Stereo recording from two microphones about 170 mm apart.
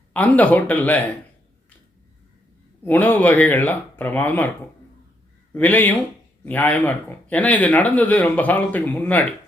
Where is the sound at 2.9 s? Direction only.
10° left (ahead or behind).